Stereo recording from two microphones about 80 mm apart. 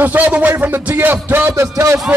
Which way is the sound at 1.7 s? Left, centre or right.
Right.